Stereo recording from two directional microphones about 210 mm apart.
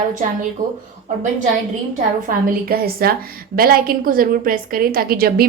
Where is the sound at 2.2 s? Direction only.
45° right (ahead or behind).